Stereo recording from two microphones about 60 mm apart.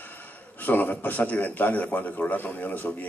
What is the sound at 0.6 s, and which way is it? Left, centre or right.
A man's voice, left.